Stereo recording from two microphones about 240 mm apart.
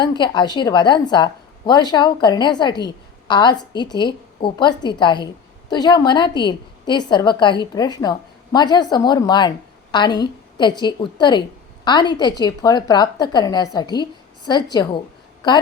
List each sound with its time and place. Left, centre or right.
0.0 s a woman's voice: centre